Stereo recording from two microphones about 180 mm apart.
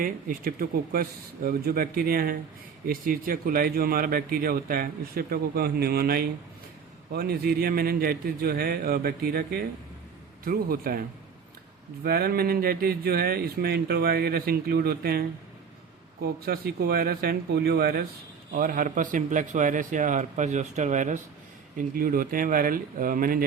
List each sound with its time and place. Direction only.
0.0 s a man's voice: 50° right (ahead or behind)
12.0 s speech: 60° right (ahead or behind)
16.2 s a man's voice: 60° right (ahead or behind)